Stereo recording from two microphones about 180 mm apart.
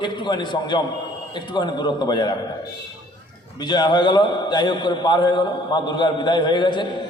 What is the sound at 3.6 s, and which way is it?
A man's voice, 25° left (ahead or behind).